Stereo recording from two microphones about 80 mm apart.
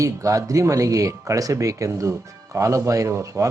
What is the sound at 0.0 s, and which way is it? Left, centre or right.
A man's voice, right.